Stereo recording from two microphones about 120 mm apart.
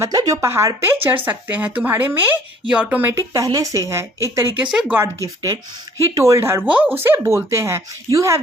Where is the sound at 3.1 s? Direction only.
30° right (ahead or behind).